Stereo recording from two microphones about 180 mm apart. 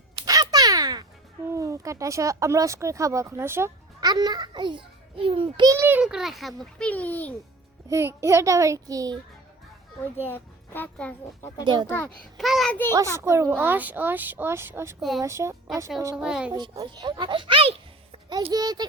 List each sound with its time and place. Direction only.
0.2 s a sound: 20° right (ahead or behind)
1.5 s speech: 15° right (ahead or behind); by 7.3 s 10° left (ahead or behind)
7.9 s speech: 15° right (ahead or behind)
10.2 s speech: 10° left (ahead or behind)
11.6 s a child's voice: 25° right (ahead or behind)
11.9 s speech: 10° left (ahead or behind)
12.4 s a child's voice: centre (ahead or behind)
13.1 s speech: 15° right (ahead or behind)
16.1 s a woman's voice: 5° right (ahead or behind)
16.5 s speech: 20° right (ahead or behind)
18.5 s a child's voice: 20° right (ahead or behind)